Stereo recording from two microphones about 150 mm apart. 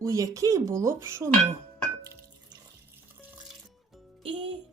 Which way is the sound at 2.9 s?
10° right (ahead or behind).